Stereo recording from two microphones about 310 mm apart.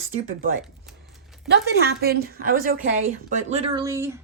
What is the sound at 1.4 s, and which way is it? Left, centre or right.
A woman's voice, right.